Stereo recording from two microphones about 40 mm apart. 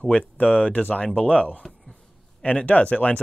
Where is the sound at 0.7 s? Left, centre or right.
Left.